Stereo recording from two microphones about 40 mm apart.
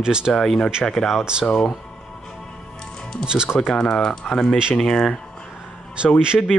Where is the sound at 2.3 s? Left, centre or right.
Centre.